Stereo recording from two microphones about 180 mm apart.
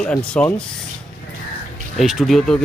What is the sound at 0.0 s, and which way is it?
Speech, 5° left (ahead or behind).